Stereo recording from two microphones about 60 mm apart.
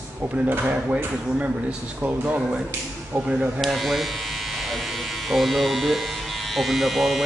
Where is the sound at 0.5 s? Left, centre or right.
Right.